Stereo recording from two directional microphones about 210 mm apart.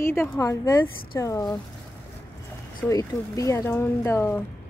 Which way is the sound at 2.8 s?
15° left (ahead or behind).